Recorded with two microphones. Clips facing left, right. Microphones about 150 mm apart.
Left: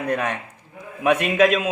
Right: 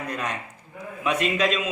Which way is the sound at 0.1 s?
60° left (ahead or behind).